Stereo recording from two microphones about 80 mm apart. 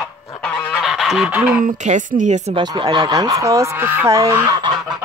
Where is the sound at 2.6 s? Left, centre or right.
Right.